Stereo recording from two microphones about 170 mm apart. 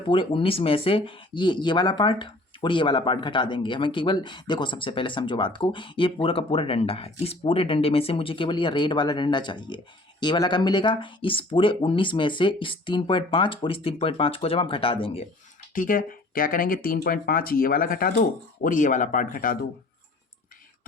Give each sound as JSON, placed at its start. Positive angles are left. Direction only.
{"t": 0.1, "sound": "speech", "side_deg": 30}
{"t": 15.7, "sound": "speech", "side_deg": 55}